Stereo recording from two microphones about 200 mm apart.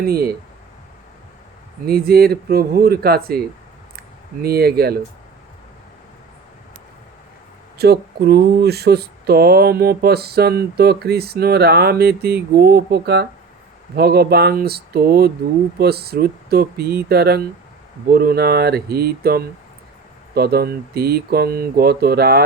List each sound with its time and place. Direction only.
0.0 s speech: 50° right (ahead or behind)
1.9 s speech: 50° right (ahead or behind)
4.4 s speech: 50° right (ahead or behind)
7.8 s speech: 55° right (ahead or behind)